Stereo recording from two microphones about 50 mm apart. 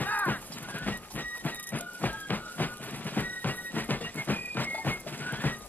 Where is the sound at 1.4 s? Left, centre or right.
Left.